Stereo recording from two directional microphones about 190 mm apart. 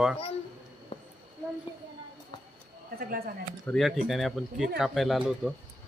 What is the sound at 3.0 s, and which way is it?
Speech, 50° right (ahead or behind).